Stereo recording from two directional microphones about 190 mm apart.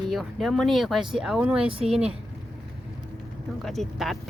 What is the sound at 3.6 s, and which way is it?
Speech, centre (ahead or behind).